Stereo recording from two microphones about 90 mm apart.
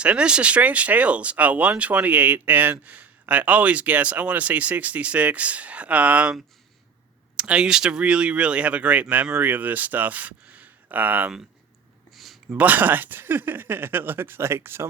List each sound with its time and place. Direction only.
0.0 s speech: 10° right (ahead or behind)
7.3 s speech: 10° right (ahead or behind)
12.1 s a sound: centre (ahead or behind)
12.5 s speech: 20° right (ahead or behind)